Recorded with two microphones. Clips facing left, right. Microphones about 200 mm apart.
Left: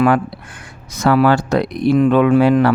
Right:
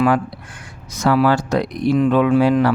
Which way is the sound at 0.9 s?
60° left (ahead or behind).